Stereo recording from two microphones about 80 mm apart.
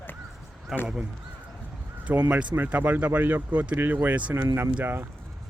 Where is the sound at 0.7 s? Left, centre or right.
Centre.